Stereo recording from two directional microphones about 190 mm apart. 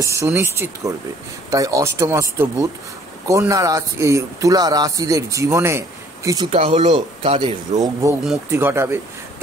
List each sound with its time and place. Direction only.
0.0 s speech: 15° right (ahead or behind)
6.5 s speech: 30° right (ahead or behind)
8.5 s speech: 10° right (ahead or behind)